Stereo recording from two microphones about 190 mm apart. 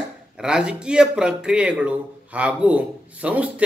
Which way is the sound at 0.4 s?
5° right (ahead or behind).